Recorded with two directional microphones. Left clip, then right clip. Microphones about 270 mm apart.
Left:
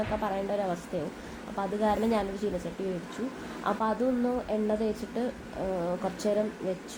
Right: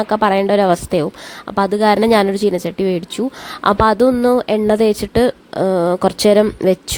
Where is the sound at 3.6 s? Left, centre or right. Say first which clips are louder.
Right 17 dB; right.